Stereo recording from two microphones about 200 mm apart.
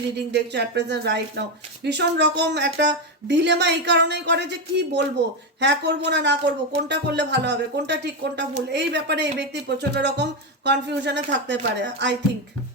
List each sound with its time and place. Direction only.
0.3 s speech: 60° right (ahead or behind)